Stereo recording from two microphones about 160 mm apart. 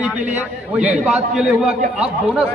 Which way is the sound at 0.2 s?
50° right (ahead or behind).